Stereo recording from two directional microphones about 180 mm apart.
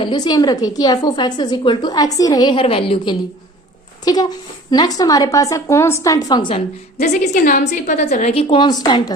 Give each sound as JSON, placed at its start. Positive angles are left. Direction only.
{"t": 0.0, "sound": "a woman's voice", "side_deg": 25}
{"t": 7.0, "sound": "a woman's voice", "side_deg": 45}